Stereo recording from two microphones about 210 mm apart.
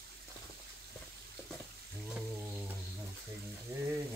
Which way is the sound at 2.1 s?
5° right (ahead or behind).